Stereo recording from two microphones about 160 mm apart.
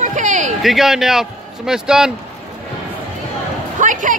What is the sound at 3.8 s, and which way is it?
Music, 50° right (ahead or behind).